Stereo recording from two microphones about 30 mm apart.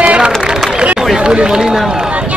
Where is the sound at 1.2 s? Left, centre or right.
Right.